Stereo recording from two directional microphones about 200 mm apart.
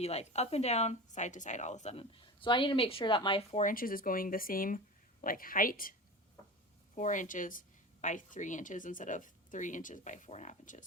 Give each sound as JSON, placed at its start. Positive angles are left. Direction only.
{"t": 0.0, "sound": "a woman's voice", "side_deg": 30}
{"t": 3.6, "sound": "speech", "side_deg": 45}
{"t": 6.9, "sound": "a woman's voice", "side_deg": 40}